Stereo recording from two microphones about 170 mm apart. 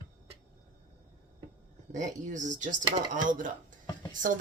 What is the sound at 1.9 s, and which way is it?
Speech, 45° right (ahead or behind).